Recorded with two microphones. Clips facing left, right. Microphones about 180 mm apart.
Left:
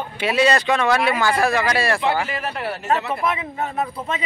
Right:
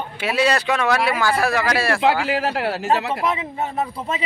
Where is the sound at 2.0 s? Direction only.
90° right.